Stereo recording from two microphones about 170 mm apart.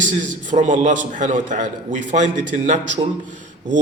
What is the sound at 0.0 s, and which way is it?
A man's voice, 50° right (ahead or behind).